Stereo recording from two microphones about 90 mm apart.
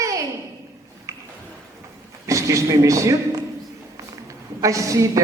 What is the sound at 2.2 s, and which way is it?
A man's voice, 35° right (ahead or behind).